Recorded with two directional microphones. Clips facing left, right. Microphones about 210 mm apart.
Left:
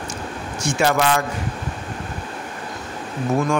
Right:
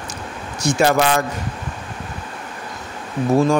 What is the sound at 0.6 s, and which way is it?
Speech, 35° right (ahead or behind).